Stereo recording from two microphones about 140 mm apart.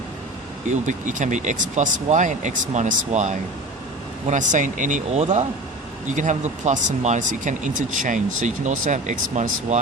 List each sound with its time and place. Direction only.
0.7 s speech: 60° right (ahead or behind)